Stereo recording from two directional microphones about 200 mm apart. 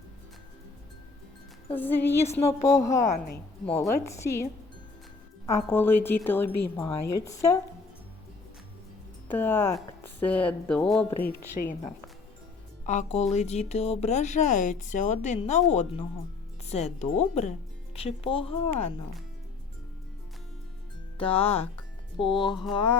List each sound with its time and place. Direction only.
1.7 s speech: 10° left (ahead or behind)
5.5 s speech: 10° left (ahead or behind)
9.3 s speech: 10° left (ahead or behind)
12.8 s speech: 35° left (ahead or behind)
21.2 s speech: 25° left (ahead or behind)